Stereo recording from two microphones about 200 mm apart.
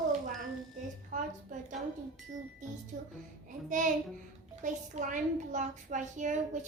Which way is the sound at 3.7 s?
40° right (ahead or behind).